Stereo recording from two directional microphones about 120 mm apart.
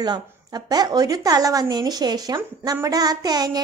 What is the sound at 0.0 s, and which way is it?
A woman's voice, 35° right (ahead or behind).